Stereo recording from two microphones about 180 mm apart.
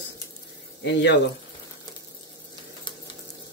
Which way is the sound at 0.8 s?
75° left (ahead or behind).